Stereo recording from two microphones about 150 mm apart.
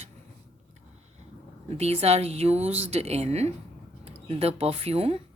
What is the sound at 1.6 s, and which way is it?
A woman's voice, 45° right (ahead or behind).